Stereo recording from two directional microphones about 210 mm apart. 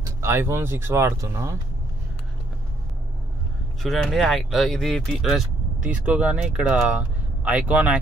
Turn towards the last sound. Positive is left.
turn(degrees=-5)  # may be behind; listen again after turning